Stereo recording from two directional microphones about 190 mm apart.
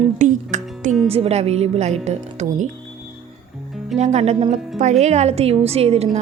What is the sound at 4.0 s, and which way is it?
A woman's voice, 35° right (ahead or behind).